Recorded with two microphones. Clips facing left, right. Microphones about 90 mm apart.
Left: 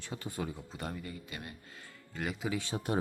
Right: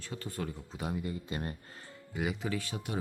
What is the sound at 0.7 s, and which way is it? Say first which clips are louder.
Speech: right 3 dB; 5° right (ahead or behind).